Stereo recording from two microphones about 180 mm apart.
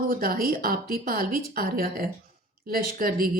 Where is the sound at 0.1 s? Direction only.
55° right (ahead or behind).